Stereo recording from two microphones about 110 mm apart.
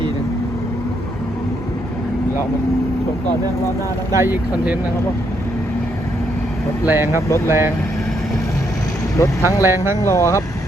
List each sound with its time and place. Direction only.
4.1 s speech: 25° right (ahead or behind)
6.8 s speech: 20° right (ahead or behind)
9.1 s speech: 30° left (ahead or behind)
9.6 s speech: 20° right (ahead or behind)
10.0 s speech: 25° left (ahead or behind)